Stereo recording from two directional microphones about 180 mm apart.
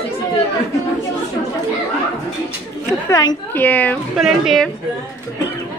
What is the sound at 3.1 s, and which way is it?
A woman's voice, 20° left (ahead or behind).